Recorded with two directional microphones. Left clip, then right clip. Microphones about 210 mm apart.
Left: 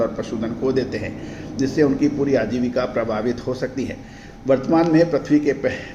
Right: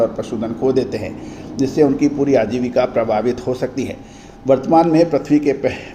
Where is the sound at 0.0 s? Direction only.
25° right (ahead or behind).